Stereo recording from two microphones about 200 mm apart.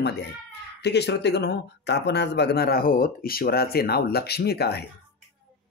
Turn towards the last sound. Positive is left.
turn(degrees=55)  # may be behind; listen again after turning